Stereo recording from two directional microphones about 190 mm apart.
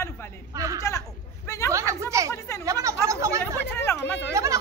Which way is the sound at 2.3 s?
15° left (ahead or behind).